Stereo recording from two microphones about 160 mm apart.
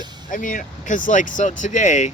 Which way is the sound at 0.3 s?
55° left (ahead or behind).